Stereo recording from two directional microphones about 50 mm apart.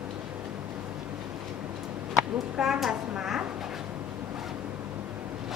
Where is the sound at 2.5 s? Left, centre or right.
Centre.